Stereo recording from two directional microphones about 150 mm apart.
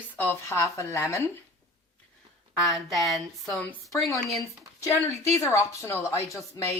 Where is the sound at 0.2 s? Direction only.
15° left (ahead or behind).